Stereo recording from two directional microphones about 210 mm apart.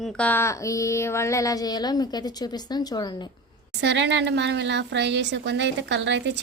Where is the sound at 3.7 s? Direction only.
55° right (ahead or behind).